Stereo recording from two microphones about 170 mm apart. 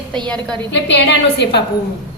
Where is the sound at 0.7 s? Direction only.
90° left.